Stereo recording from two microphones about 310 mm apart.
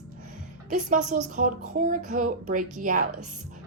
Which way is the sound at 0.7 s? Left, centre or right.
Right.